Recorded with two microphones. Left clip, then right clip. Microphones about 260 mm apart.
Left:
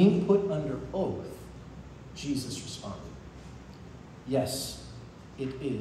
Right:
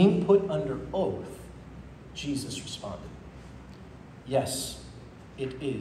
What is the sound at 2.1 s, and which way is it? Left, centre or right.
Speech, centre.